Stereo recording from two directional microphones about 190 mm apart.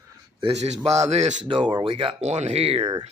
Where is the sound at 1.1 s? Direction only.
35° right (ahead or behind).